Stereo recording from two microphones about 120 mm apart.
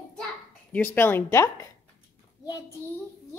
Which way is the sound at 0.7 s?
15° left (ahead or behind).